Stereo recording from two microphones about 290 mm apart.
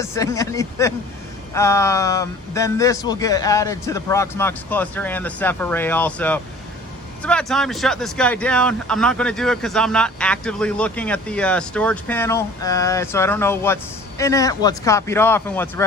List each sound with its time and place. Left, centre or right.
0.0 s a man's voice: centre